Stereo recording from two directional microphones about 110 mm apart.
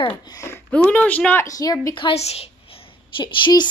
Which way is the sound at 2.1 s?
70° left (ahead or behind).